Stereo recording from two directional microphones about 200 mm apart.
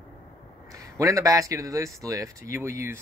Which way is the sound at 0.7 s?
15° right (ahead or behind).